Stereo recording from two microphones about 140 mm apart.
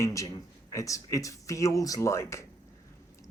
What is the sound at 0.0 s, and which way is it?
Speech, 20° left (ahead or behind).